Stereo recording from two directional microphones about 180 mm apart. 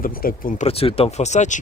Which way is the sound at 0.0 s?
55° left (ahead or behind).